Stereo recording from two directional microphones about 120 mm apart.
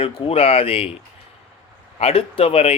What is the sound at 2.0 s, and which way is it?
Speech, 55° left (ahead or behind).